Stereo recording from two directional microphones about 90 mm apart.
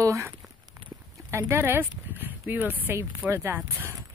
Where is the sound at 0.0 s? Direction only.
35° right (ahead or behind).